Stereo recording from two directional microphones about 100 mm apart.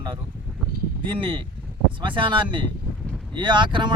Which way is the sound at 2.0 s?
55° right (ahead or behind).